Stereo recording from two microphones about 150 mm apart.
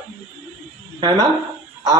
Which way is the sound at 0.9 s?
30° right (ahead or behind).